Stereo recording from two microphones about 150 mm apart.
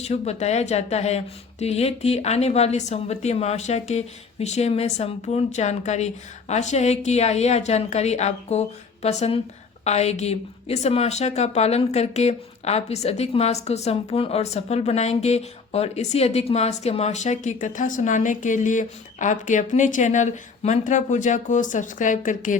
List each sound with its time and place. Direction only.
0.0 s a woman's voice: 45° left (ahead or behind)